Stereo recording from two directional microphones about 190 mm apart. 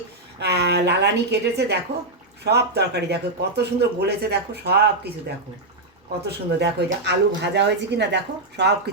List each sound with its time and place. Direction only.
0.3 s speech: 60° right (ahead or behind)
6.2 s speech: 60° right (ahead or behind)